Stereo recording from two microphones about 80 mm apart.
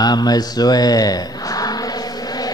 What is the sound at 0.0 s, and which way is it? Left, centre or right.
Speech, left.